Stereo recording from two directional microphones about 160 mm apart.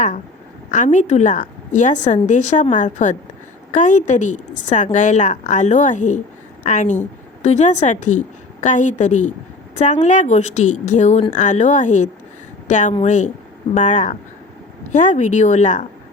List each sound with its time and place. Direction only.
0.7 s speech: 50° left (ahead or behind)